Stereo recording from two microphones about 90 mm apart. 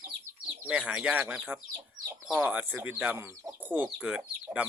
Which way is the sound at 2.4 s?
20° right (ahead or behind).